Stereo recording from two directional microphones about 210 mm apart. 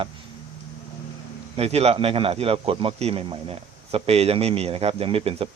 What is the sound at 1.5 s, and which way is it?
A man's voice, 30° right (ahead or behind).